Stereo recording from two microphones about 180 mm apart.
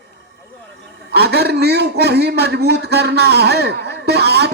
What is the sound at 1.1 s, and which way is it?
A man's voice, 65° right (ahead or behind).